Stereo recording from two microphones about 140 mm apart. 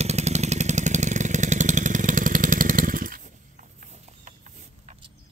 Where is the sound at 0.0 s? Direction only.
50° right (ahead or behind); by 3.2 s 80° right.